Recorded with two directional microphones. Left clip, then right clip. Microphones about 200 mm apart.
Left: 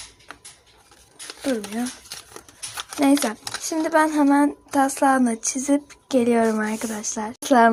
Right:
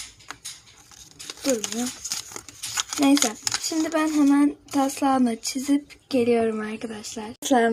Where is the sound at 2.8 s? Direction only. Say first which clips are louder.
Right 1 dB; 30° right (ahead or behind).